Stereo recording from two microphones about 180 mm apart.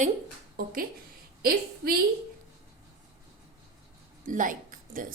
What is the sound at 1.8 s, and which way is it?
Speech, 60° right (ahead or behind).